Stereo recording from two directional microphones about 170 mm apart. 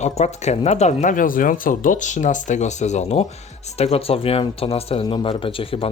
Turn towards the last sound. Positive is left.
turn(degrees=35)  # may be behind; listen again after turning